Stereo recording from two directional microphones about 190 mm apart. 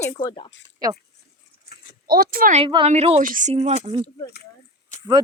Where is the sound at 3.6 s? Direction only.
35° right (ahead or behind).